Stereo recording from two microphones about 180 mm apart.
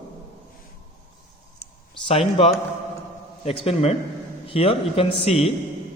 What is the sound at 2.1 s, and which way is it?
A man's voice, 30° left (ahead or behind).